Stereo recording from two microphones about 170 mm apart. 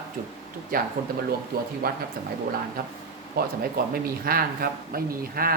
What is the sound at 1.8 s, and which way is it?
Speech, 60° right (ahead or behind).